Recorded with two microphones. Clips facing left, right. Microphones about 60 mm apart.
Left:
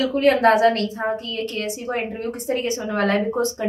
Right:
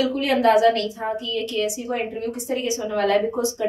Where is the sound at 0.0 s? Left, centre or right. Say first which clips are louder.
Left 3 dB; left.